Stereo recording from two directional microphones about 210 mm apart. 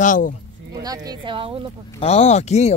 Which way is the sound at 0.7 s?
15° right (ahead or behind).